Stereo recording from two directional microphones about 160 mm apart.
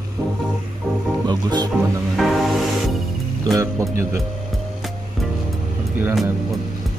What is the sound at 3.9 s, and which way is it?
Speech, 15° right (ahead or behind).